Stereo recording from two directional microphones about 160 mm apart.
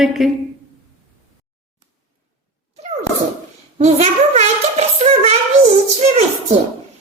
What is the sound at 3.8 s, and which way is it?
Speech, 45° right (ahead or behind).